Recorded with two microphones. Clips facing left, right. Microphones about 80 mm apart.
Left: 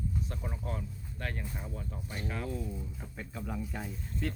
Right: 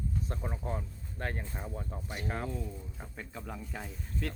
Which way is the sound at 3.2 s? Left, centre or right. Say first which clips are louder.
Left 4 dB; centre.